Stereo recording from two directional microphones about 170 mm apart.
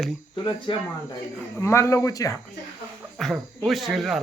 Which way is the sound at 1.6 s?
15° left (ahead or behind).